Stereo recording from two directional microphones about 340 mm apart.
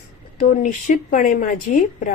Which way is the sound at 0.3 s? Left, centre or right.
Left.